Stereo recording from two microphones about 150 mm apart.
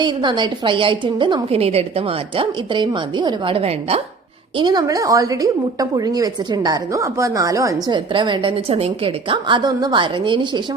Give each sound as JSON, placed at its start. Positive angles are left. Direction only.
{"t": 0.0, "sound": "a woman's voice", "side_deg": -30}
{"t": 4.5, "sound": "a woman's voice", "side_deg": -30}